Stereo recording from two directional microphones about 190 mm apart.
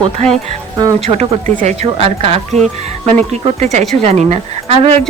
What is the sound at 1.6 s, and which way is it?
Speech, 35° right (ahead or behind).